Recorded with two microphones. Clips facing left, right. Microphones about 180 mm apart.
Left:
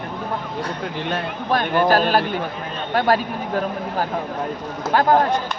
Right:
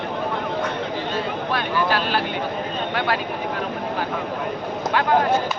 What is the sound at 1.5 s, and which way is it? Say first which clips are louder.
Speech: left 7 dB; 45° left (ahead or behind).